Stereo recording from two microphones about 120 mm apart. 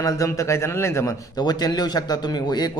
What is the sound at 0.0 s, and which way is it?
A man's voice, 30° left (ahead or behind).